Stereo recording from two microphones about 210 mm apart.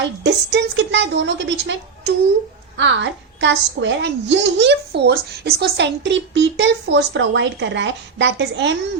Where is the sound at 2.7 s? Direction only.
60° right (ahead or behind).